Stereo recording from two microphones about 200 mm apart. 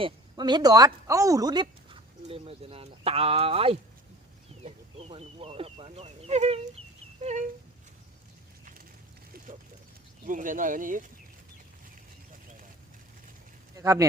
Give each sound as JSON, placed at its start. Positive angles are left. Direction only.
{"t": 0.0, "sound": "speech", "side_deg": -20}
{"t": 4.6, "sound": "a sound", "side_deg": -30}
{"t": 10.2, "sound": "speech", "side_deg": -40}
{"t": 13.7, "sound": "speech", "side_deg": -15}